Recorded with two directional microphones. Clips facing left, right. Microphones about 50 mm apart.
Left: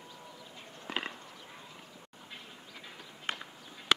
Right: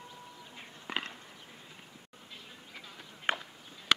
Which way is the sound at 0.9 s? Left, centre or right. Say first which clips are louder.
Even; centre.